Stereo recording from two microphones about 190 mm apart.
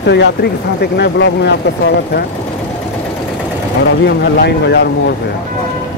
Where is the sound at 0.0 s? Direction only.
65° left (ahead or behind).